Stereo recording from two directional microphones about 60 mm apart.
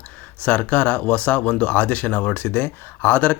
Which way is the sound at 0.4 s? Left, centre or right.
Left.